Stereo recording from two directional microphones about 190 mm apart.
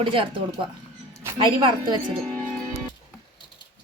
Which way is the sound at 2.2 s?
10° left (ahead or behind).